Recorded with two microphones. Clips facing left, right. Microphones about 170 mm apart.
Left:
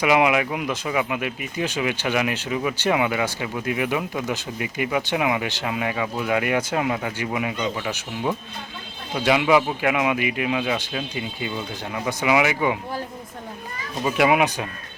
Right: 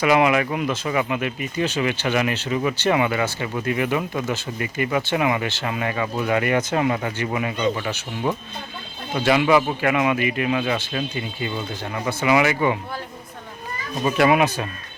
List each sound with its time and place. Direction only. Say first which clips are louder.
0.0 s speech: right 1 dB; 15° left (ahead or behind)
14.0 s speech: right 1 dB; 10° left (ahead or behind)